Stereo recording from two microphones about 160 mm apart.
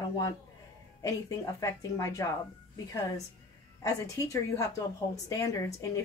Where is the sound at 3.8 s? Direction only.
20° left (ahead or behind).